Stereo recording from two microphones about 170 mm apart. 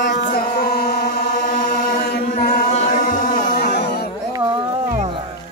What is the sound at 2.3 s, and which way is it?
Chant, 55° left (ahead or behind).